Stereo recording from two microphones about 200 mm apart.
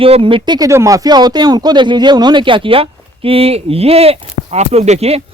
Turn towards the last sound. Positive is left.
turn(degrees=-30)  # may be behind; listen again after turning